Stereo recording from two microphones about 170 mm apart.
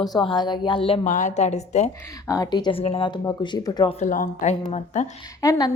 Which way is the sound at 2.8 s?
35° left (ahead or behind).